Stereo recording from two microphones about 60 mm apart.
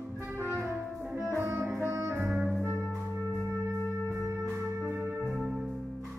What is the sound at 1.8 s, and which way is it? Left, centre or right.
Music, right.